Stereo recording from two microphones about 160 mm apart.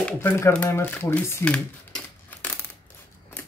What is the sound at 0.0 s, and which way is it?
Speech, 10° left (ahead or behind).